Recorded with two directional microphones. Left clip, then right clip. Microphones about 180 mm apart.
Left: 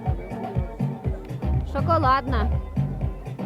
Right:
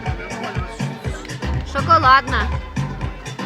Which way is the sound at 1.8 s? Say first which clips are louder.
Right 8 dB; 20° left (ahead or behind).